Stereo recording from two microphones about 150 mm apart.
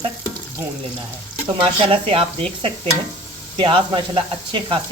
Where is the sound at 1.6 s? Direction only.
35° right (ahead or behind).